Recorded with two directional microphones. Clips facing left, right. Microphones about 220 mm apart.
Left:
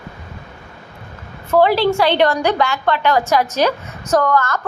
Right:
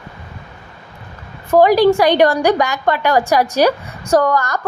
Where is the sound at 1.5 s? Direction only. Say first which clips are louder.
Right 4 dB; 15° right (ahead or behind).